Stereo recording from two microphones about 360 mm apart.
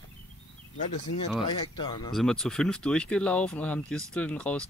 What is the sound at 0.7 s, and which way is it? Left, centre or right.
Speech, centre.